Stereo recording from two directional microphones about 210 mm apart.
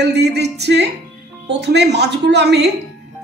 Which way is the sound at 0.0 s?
55° right (ahead or behind).